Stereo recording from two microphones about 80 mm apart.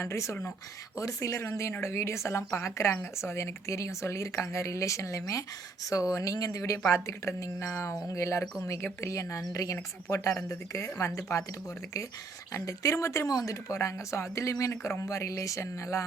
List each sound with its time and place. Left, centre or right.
0.0 s speech: left
12.5 s speech: left